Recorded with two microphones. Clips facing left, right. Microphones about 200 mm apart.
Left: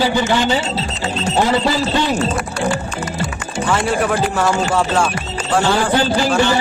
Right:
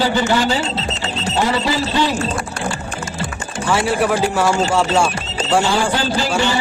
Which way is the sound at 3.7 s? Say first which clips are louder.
Right 1 dB; 10° right (ahead or behind).